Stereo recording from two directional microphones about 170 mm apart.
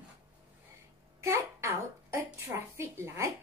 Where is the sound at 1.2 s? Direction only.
15° right (ahead or behind).